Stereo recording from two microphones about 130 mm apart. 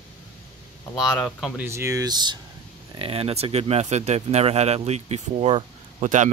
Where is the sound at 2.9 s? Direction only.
45° right (ahead or behind).